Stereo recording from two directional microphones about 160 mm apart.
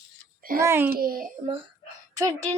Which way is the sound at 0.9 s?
65° right (ahead or behind).